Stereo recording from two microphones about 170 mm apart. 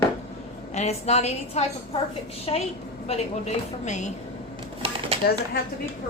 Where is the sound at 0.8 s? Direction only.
40° left (ahead or behind).